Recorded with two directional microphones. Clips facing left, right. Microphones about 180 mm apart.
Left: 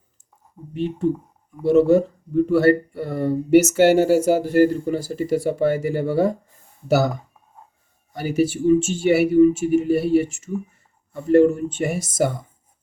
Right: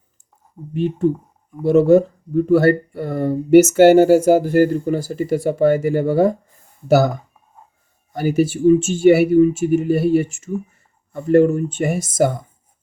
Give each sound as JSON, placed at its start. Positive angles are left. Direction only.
{"t": 0.7, "sound": "speech", "side_deg": -50}
{"t": 8.1, "sound": "speech", "side_deg": -50}